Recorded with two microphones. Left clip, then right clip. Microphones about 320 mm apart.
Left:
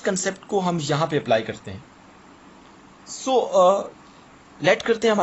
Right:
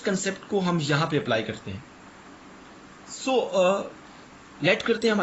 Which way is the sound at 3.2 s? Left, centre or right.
Centre.